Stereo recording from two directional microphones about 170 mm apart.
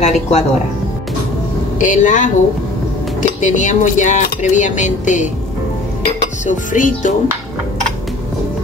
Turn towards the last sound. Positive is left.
turn(degrees=50)  # may be behind; listen again after turning